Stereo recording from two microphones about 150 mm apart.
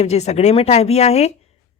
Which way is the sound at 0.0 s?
45° left (ahead or behind).